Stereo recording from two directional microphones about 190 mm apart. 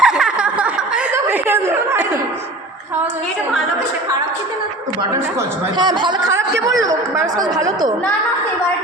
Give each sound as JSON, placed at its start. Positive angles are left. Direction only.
{"t": 0.0, "sound": "snicker", "side_deg": -5}
{"t": 5.7, "sound": "speech", "side_deg": -25}